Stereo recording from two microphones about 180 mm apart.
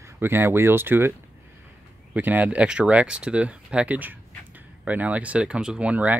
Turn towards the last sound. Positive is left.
turn(degrees=-10)  # may be behind; listen again after turning